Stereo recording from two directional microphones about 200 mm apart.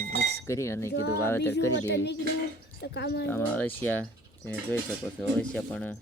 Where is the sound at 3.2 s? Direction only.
10° left (ahead or behind).